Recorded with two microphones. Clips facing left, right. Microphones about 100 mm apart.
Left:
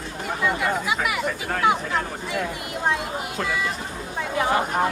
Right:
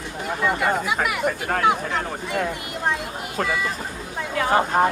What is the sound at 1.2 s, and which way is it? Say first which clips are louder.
Speech: right 3 dB; 50° right (ahead or behind).